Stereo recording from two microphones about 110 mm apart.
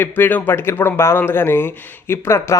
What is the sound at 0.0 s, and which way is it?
Speech, 15° left (ahead or behind).